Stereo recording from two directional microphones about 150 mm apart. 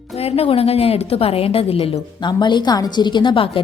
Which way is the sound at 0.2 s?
40° left (ahead or behind).